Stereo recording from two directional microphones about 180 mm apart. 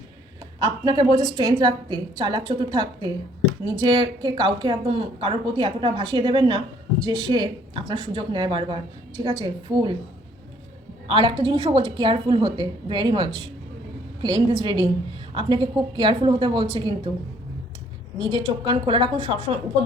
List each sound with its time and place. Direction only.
0.6 s speech: 20° right (ahead or behind)
11.1 s speech: 25° right (ahead or behind)
18.2 s speech: 25° right (ahead or behind)